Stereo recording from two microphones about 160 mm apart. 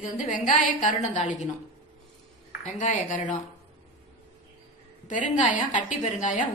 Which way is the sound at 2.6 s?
50° left (ahead or behind).